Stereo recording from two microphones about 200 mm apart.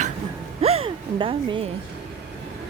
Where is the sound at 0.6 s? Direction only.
30° right (ahead or behind).